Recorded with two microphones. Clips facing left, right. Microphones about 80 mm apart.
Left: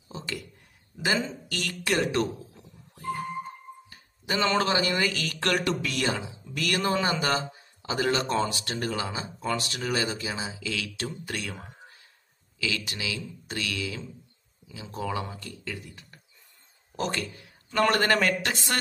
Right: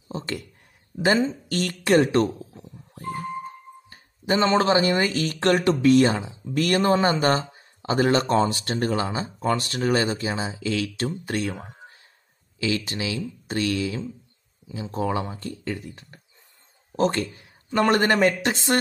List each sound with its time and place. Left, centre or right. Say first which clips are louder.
0.1 s speech: right 5 dB; right
1.9 s a sound: right 7 dB; right
3.9 s speech: right 7 dB; right